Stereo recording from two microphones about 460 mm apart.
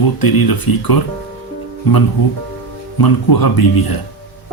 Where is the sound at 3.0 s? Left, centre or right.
Left.